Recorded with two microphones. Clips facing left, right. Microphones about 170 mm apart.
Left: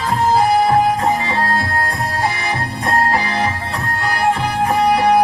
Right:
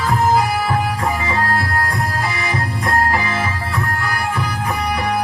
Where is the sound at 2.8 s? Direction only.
30° left (ahead or behind).